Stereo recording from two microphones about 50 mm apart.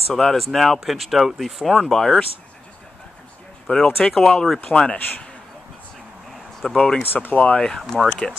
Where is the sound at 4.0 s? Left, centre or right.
Centre.